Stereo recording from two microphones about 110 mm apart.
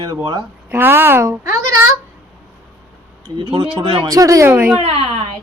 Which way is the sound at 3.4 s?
50° right (ahead or behind).